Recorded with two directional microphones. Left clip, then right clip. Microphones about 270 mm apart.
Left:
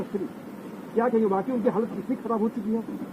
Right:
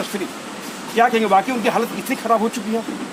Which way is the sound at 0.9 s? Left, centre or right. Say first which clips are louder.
Right 8 dB; right.